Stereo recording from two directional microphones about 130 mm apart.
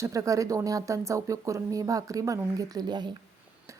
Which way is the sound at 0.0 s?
25° right (ahead or behind).